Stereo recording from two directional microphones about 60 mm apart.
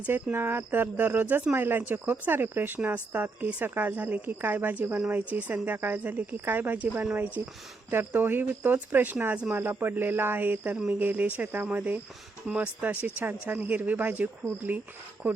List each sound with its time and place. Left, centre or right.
0.1 s speech: right
7.4 s speech: right
7.9 s speech: right
9.5 s speech: right